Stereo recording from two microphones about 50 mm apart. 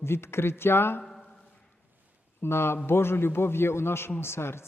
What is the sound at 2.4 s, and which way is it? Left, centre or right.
A man's voice, left.